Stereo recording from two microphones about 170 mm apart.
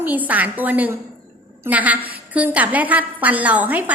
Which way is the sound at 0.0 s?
10° right (ahead or behind).